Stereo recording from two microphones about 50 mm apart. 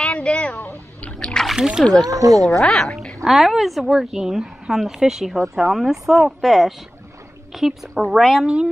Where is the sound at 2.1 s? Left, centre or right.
Right.